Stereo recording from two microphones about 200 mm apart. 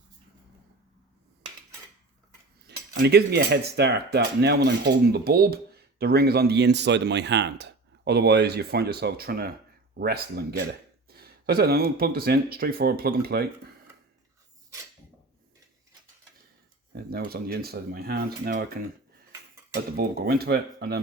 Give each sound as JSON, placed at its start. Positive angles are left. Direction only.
{"t": 2.9, "sound": "speech", "side_deg": -55}
{"t": 16.9, "sound": "speech", "side_deg": -50}